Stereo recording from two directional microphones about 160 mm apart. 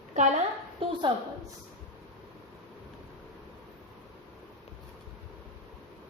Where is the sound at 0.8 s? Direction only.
35° right (ahead or behind).